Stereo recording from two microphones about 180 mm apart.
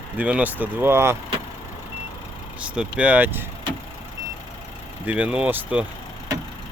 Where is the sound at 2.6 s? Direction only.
5° right (ahead or behind).